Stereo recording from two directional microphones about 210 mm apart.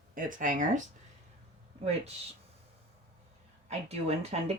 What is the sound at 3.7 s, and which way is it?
Speech, 30° right (ahead or behind).